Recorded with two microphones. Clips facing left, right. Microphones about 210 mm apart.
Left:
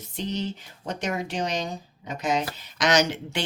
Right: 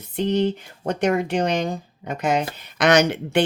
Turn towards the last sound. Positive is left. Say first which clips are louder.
# right 6 dB
turn(degrees=-55)  # may be behind; listen again after turning